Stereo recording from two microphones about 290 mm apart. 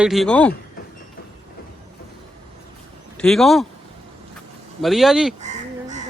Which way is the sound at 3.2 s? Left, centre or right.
Centre.